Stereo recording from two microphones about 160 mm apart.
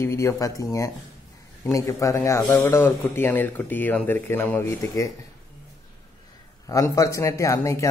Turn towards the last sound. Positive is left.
turn(degrees=20)  # may be behind; listen again after turning